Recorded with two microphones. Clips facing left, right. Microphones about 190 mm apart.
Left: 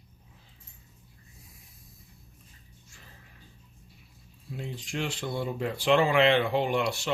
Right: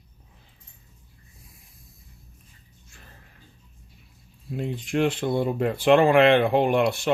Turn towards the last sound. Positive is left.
turn(degrees=-55)  # may be behind; listen again after turning